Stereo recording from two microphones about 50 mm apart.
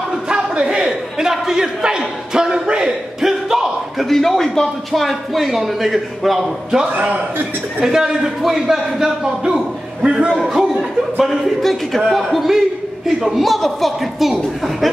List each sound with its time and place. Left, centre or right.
0.3 s a sound: centre
4.1 s speech: centre
6.9 s a man's voice: right
7.8 s a man's voice: centre
10.4 s a man's voice: centre